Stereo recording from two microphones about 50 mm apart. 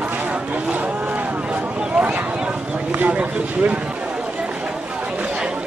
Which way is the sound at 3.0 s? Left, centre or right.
Right.